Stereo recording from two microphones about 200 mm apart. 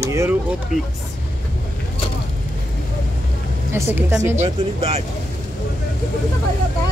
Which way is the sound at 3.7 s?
10° right (ahead or behind).